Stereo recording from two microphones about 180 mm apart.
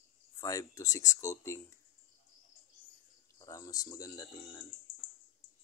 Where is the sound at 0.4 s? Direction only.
20° left (ahead or behind).